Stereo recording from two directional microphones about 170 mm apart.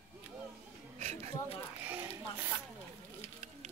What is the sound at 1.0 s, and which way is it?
Speech, 40° right (ahead or behind).